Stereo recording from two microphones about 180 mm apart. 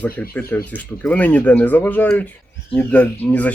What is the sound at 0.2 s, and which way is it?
Speech, 10° left (ahead or behind).